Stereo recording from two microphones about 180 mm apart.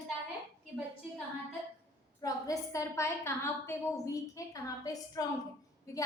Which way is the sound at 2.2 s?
15° left (ahead or behind).